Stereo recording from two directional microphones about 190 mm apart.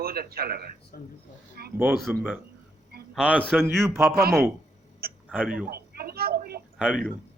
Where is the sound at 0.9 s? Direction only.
50° left (ahead or behind).